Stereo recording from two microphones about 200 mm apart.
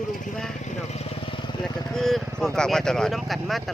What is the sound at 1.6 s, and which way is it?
Speech, centre (ahead or behind).